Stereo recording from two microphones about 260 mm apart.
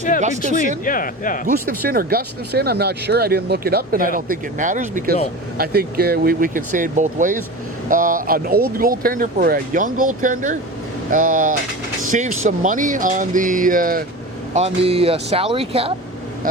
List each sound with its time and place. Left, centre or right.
0.2 s speech: right
0.9 s speech: left
1.5 s speech: right